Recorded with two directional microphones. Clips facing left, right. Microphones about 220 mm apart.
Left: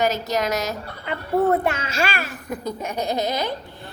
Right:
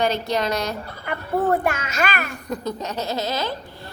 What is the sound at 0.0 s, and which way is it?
Speech, 5° left (ahead or behind).